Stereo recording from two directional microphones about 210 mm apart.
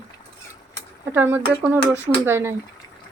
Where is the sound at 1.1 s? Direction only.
10° right (ahead or behind).